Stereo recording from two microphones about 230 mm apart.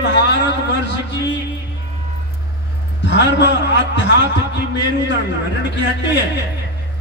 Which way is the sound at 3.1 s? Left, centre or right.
Left.